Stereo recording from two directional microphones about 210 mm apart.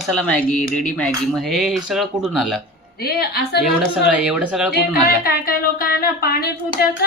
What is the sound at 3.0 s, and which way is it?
Speech, 50° left (ahead or behind).